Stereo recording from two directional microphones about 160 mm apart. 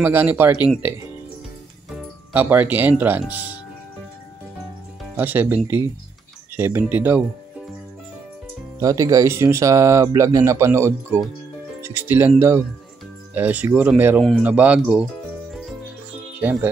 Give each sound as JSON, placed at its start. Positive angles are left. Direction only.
{"t": 0.0, "sound": "speech", "side_deg": -15}
{"t": 2.3, "sound": "speech", "side_deg": -10}
{"t": 5.1, "sound": "speech", "side_deg": -10}
{"t": 8.7, "sound": "speech", "side_deg": -20}
{"t": 16.4, "sound": "speech", "side_deg": -10}